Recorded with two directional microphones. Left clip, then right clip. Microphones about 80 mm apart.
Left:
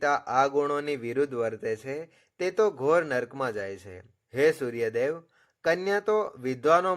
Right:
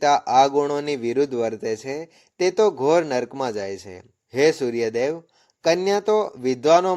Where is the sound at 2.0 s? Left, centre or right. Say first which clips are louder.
Right 8 dB; right.